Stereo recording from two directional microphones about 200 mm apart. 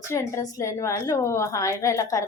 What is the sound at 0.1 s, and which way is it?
A woman's voice, 15° left (ahead or behind).